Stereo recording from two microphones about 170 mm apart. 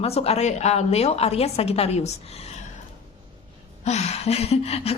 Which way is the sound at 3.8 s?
40° left (ahead or behind).